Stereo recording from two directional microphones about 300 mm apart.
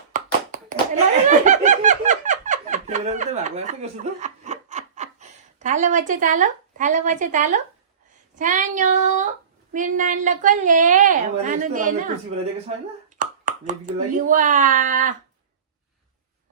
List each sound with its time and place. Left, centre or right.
0.1 s clapping: right
1.5 s snicker: right
8.4 s a woman's voice: right
13.1 s speech: right